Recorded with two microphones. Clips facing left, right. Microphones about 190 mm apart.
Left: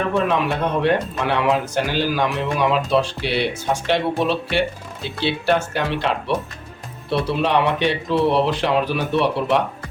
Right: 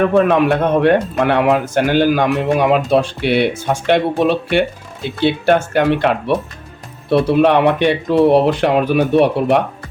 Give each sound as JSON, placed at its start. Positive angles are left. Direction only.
{"t": 0.1, "sound": "speech", "side_deg": -55}